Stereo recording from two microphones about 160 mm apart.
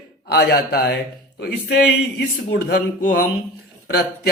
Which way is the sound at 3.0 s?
55° left (ahead or behind).